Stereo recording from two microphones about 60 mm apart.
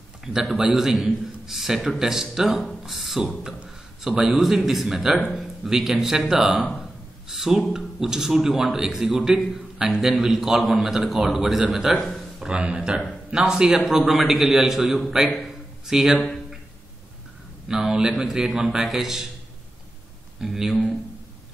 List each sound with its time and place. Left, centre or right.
0.2 s a man's voice: centre
12.5 s a man's voice: centre
17.6 s a man's voice: centre
20.3 s speech: centre